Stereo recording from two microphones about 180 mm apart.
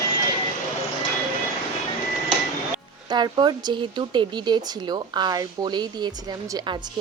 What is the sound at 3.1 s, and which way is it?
Speech, 25° right (ahead or behind).